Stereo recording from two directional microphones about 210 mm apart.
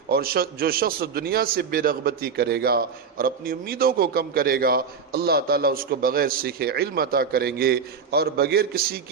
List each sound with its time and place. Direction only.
0.1 s a man's voice: 45° right (ahead or behind)